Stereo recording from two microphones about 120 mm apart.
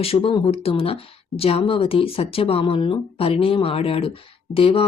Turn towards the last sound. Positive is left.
turn(degrees=50)  # may be behind; listen again after turning